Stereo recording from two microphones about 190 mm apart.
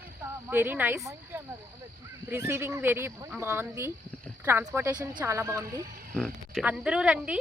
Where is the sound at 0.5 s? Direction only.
10° right (ahead or behind).